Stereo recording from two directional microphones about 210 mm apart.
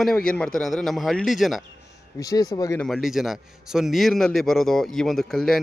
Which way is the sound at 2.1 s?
15° left (ahead or behind).